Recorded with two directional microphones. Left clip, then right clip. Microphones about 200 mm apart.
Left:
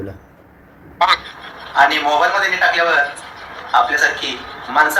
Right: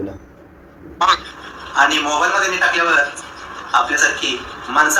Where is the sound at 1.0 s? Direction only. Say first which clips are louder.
Left 1 dB; centre (ahead or behind).